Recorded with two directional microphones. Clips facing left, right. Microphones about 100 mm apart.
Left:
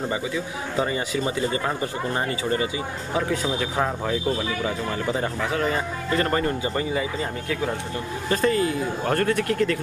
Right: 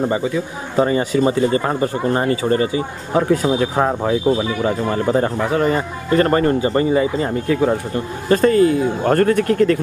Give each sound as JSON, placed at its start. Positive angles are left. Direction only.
{"t": 0.7, "sound": "speech", "side_deg": -45}